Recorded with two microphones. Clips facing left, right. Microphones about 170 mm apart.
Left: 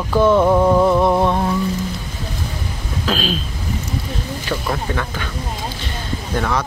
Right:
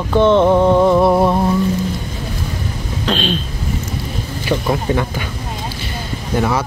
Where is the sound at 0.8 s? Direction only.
Centre (ahead or behind).